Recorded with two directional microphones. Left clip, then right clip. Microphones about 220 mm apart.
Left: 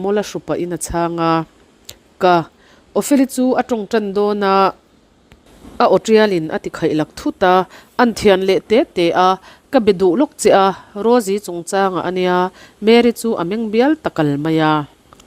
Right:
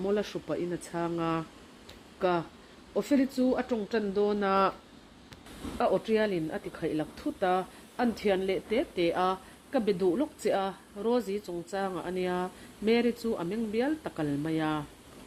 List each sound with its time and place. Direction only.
0.0 s speech: 45° left (ahead or behind)
1.9 s a sound: 45° left (ahead or behind)
2.9 s speech: 45° left (ahead or behind)
5.7 s speech: 45° left (ahead or behind)